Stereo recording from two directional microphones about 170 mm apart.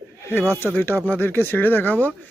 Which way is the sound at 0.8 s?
10° left (ahead or behind).